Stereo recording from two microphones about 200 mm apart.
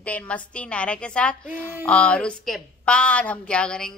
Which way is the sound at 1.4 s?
10° right (ahead or behind).